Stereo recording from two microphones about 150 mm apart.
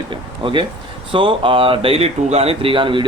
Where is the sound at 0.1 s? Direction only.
35° right (ahead or behind).